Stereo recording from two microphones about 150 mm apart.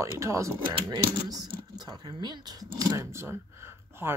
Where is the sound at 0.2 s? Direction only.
20° right (ahead or behind).